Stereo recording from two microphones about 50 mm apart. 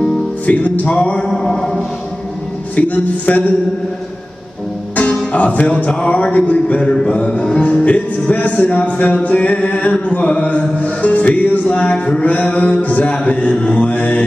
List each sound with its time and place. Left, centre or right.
0.0 s music: left
1.3 s a sound: centre
2.7 s a man's voice: left
5.3 s music: left